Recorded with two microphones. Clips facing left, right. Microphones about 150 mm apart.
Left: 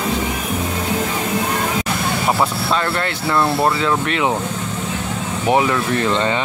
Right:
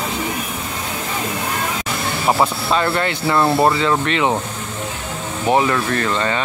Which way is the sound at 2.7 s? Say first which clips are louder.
Right 2 dB; 5° right (ahead or behind).